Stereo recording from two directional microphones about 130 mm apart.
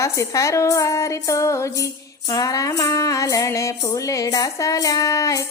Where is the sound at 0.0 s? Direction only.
25° left (ahead or behind).